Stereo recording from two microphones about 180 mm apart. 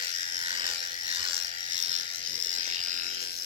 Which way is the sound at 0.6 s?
30° right (ahead or behind).